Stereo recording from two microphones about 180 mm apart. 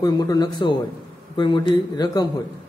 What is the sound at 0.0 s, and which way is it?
A man's voice, 20° left (ahead or behind).